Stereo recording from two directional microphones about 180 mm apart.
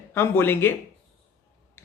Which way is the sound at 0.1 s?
15° left (ahead or behind).